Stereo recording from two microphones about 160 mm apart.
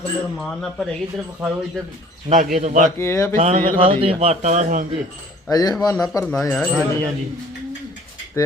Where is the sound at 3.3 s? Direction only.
40° right (ahead or behind).